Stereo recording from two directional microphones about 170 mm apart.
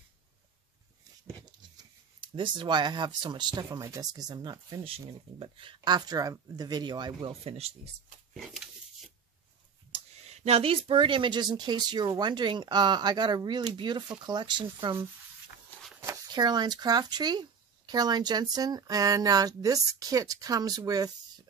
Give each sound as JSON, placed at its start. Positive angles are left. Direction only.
{"t": 1.8, "sound": "speech", "side_deg": -30}
{"t": 10.2, "sound": "speech", "side_deg": -40}
{"t": 16.0, "sound": "speech", "side_deg": -20}